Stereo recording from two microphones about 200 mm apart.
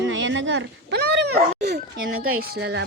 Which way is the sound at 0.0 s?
65° right (ahead or behind).